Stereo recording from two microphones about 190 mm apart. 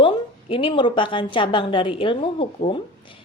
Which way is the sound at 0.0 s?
25° left (ahead or behind).